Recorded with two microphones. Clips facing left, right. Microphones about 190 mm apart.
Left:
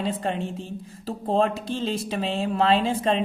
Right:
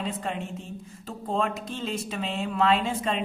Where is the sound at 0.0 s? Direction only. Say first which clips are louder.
Left 5 dB; 30° left (ahead or behind).